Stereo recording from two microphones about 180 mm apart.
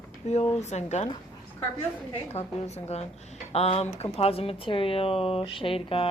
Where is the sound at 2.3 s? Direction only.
35° left (ahead or behind).